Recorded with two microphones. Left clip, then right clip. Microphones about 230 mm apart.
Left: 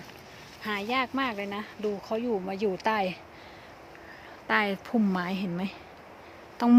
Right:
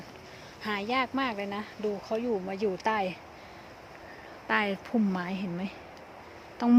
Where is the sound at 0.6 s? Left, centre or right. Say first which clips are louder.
Left 1 dB; centre.